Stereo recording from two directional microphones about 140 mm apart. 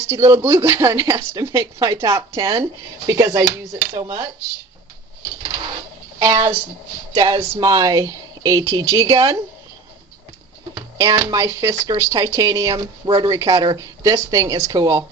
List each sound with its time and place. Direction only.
0.0 s speech: 20° right (ahead or behind)
6.2 s a woman's voice: 35° right (ahead or behind)
11.0 s speech: 25° right (ahead or behind)